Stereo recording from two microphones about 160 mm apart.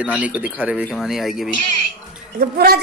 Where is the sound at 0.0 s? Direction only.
10° right (ahead or behind).